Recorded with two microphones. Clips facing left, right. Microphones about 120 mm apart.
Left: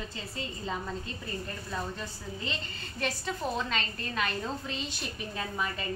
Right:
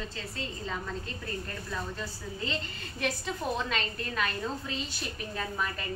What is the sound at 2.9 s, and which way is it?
A woman's voice, centre (ahead or behind).